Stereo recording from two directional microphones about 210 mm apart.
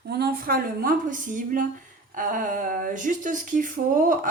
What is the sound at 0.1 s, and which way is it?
A woman's voice, 50° right (ahead or behind).